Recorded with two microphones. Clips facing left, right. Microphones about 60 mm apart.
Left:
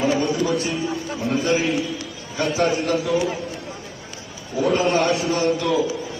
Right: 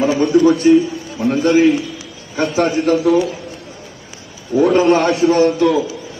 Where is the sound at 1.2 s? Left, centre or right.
Right.